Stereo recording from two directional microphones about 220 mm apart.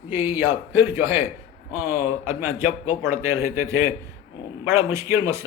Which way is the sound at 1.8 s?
30° left (ahead or behind).